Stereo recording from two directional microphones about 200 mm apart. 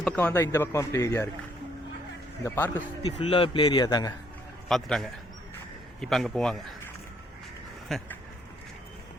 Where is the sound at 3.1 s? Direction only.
25° left (ahead or behind).